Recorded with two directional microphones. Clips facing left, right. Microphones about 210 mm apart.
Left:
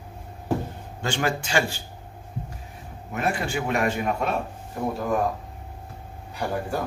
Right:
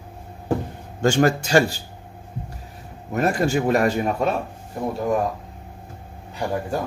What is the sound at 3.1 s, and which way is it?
A man's voice, 40° right (ahead or behind).